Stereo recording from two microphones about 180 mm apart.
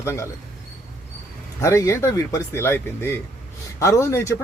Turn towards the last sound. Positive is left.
turn(degrees=15)  # may be behind; listen again after turning